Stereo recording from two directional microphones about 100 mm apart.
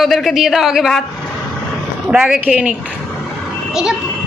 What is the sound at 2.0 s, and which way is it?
Speech, 5° right (ahead or behind).